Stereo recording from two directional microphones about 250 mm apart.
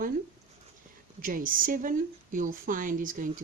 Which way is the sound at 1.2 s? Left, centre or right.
Right.